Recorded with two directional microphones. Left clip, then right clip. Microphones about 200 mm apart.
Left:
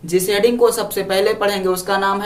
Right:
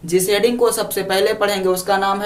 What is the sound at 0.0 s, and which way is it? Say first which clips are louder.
Speech: even; 10° right (ahead or behind).